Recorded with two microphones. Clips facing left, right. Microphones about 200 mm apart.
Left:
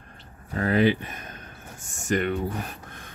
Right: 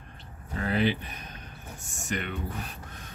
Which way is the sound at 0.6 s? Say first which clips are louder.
Left 6 dB; 50° left (ahead or behind).